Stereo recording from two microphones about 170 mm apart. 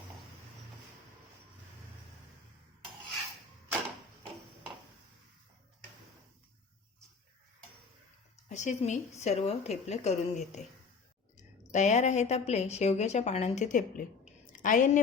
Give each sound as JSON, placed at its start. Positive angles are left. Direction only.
{"t": 8.4, "sound": "a woman's voice", "side_deg": 45}
{"t": 11.7, "sound": "a woman's voice", "side_deg": 45}